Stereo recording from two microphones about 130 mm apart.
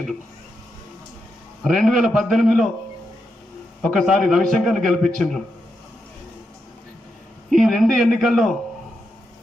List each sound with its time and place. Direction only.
1.6 s a man's voice: 5° left (ahead or behind)
3.8 s a man's voice: centre (ahead or behind)
7.5 s a man's voice: centre (ahead or behind)